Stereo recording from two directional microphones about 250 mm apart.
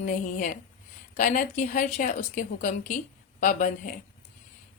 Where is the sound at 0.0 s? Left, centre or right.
Left.